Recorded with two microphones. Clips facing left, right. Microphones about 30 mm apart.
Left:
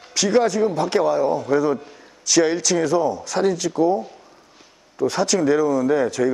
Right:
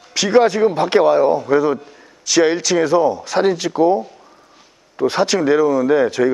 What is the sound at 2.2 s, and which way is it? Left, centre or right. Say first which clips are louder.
Speech: right 3 dB; centre.